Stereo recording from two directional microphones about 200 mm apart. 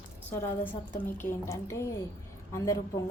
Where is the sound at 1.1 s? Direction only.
15° left (ahead or behind).